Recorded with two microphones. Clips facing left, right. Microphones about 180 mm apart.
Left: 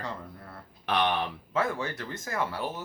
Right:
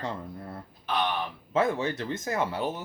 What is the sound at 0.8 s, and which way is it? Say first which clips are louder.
Speech: left 2 dB; 70° left (ahead or behind).